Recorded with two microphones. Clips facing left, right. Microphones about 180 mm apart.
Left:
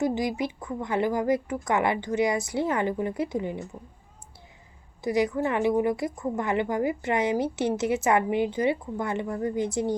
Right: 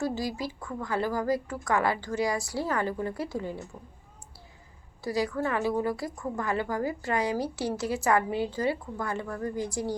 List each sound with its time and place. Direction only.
0.0 s a woman's voice: 20° left (ahead or behind)
5.0 s a woman's voice: 20° left (ahead or behind)